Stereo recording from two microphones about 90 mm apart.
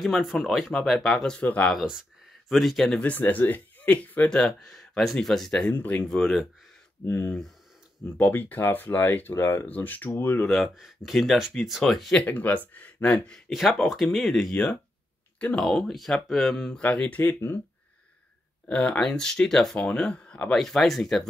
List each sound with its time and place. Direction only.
0.0 s speech: centre (ahead or behind); by 1.7 s 15° left (ahead or behind)
2.5 s speech: centre (ahead or behind)
3.0 s speech: 15° left (ahead or behind)
4.3 s speech: 5° left (ahead or behind)
5.7 s speech: 20° left (ahead or behind)
6.0 s speech: 5° left (ahead or behind)
7.1 s speech: 25° left (ahead or behind)
10.4 s speech: centre (ahead or behind)
12.3 s speech: 20° left (ahead or behind)
15.3 s a sound: 15° left (ahead or behind)
15.6 s speech: 5° left (ahead or behind)
18.7 s speech: 10° left (ahead or behind)